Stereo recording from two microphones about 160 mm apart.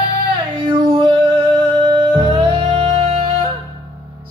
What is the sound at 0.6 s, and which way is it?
Music, 35° right (ahead or behind).